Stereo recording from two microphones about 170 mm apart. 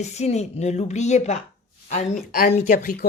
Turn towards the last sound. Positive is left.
turn(degrees=60)  # may be behind; listen again after turning